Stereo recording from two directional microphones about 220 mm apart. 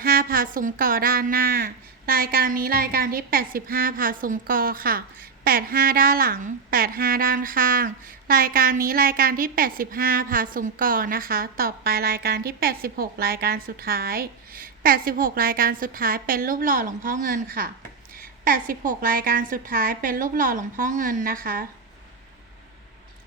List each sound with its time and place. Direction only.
0.0 s a woman's voice: 40° right (ahead or behind)